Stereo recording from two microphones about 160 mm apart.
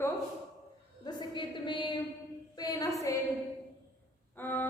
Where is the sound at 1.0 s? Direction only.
25° left (ahead or behind).